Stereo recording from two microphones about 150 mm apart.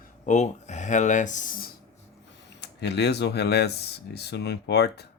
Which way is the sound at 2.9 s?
90° left.